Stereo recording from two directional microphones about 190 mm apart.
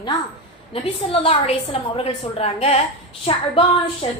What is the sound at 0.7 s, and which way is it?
A woman's voice, 30° left (ahead or behind).